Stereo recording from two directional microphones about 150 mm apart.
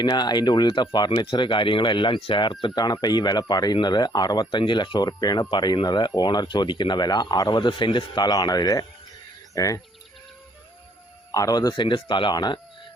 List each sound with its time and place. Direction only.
0.0 s speech: 30° left (ahead or behind)
11.3 s speech: 25° left (ahead or behind)